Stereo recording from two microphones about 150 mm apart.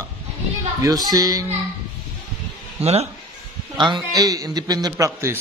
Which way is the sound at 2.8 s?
45° right (ahead or behind).